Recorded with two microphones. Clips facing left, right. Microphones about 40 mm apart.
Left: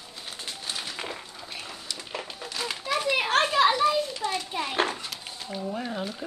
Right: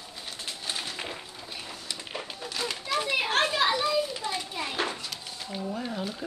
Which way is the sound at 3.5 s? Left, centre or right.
Left.